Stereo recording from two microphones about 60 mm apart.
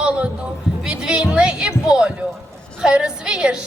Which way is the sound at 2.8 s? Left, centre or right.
Centre.